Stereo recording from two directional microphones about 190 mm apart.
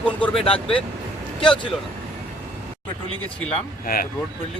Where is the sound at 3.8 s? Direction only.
50° left (ahead or behind).